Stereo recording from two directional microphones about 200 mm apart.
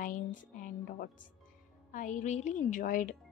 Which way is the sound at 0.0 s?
40° left (ahead or behind).